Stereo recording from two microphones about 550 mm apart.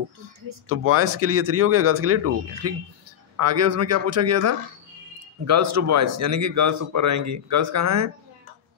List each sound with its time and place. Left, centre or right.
0.7 s speech: right